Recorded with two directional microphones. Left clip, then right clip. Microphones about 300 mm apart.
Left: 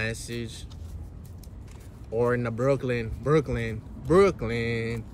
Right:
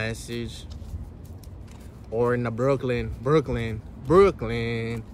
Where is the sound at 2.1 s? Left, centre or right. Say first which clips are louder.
Right 1 dB; centre.